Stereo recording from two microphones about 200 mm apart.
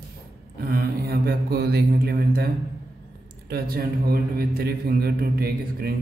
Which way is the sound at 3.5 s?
50° right (ahead or behind).